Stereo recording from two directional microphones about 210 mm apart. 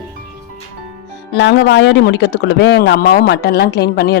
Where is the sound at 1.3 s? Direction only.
55° left (ahead or behind).